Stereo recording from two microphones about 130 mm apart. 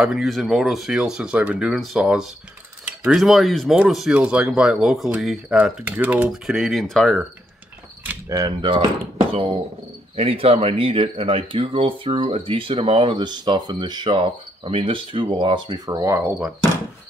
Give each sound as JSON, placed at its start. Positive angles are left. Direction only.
{"t": 0.0, "sound": "speech", "side_deg": 0}
{"t": 8.3, "sound": "speech", "side_deg": -30}